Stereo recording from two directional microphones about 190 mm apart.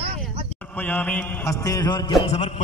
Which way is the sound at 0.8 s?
10° left (ahead or behind).